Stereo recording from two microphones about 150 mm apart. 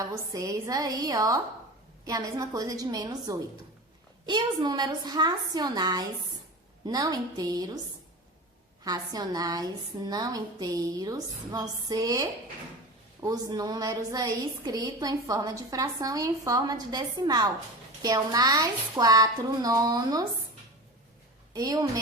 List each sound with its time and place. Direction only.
0.0 s a woman's voice: 20° right (ahead or behind)
8.8 s a woman's voice: 25° right (ahead or behind)
21.5 s a woman's voice: 25° right (ahead or behind)